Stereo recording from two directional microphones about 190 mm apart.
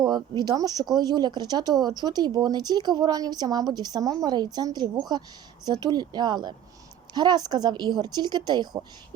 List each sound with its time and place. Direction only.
0.0 s speech: 20° right (ahead or behind)